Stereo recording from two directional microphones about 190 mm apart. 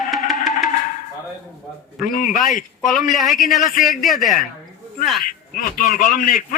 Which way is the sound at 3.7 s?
45° left (ahead or behind).